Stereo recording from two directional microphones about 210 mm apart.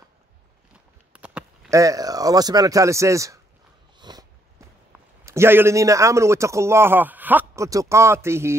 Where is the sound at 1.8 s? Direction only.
15° right (ahead or behind).